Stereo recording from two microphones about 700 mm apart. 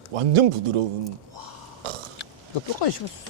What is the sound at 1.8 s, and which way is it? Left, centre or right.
Burping, right.